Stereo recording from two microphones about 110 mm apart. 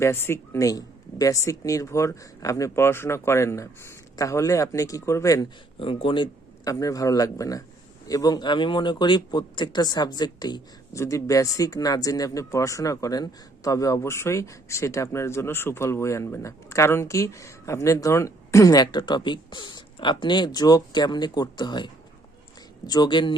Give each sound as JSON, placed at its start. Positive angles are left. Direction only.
{"t": 0.0, "sound": "speech", "side_deg": 20}
{"t": 5.8, "sound": "speech", "side_deg": 55}
{"t": 6.7, "sound": "speech", "side_deg": 30}
{"t": 10.9, "sound": "speech", "side_deg": 30}
{"t": 22.9, "sound": "speech", "side_deg": 40}